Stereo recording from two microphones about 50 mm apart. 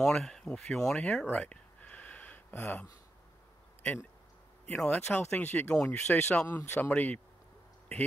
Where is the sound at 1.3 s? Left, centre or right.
Left.